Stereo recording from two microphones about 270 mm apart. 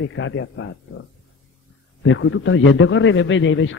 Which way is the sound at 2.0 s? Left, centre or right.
Left.